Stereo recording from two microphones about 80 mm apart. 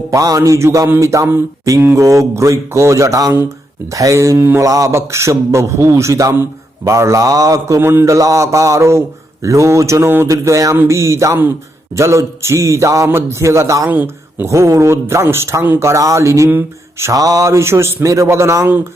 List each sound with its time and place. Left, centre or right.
0.1 s a man's voice: right
7.8 s a man's voice: right
13.9 s speech: right
14.4 s a man's voice: right
16.5 s speech: right
17.1 s a man's voice: right